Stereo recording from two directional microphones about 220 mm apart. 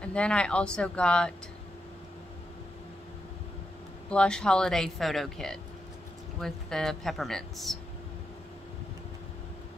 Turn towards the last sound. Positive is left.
turn(degrees=0)  # may be behind; listen again after turning